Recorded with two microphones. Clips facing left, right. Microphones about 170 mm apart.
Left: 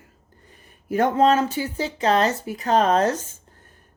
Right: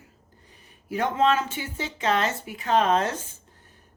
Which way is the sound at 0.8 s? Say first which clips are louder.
Left 5 dB; 45° left (ahead or behind).